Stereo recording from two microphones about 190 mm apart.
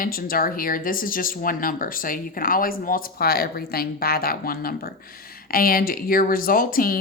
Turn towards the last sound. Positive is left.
turn(degrees=50)  # may be behind; listen again after turning